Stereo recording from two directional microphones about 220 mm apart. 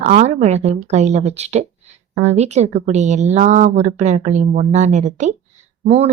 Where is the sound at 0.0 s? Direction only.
30° right (ahead or behind).